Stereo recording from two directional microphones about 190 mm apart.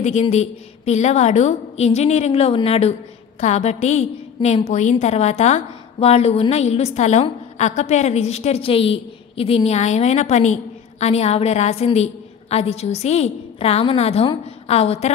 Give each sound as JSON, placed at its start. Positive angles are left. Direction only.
{"t": 0.0, "sound": "a woman's voice", "side_deg": 35}